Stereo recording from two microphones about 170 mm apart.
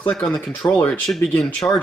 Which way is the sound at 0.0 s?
10° left (ahead or behind).